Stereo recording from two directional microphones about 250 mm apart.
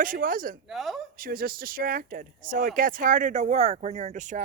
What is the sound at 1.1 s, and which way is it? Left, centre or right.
Speech, right.